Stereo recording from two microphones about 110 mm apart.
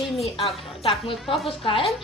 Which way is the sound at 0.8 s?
55° left (ahead or behind).